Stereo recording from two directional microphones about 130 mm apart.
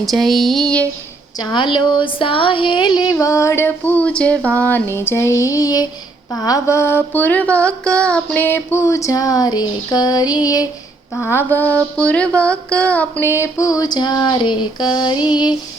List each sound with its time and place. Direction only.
0.0 s a sound: centre (ahead or behind)
1.4 s speech: 35° left (ahead or behind)
11.1 s speech: 20° left (ahead or behind); by 15.5 s 35° left (ahead or behind)